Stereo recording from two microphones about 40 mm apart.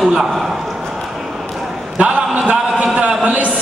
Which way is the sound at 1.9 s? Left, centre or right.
Right.